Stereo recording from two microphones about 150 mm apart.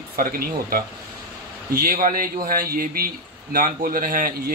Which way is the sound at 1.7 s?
70° right (ahead or behind).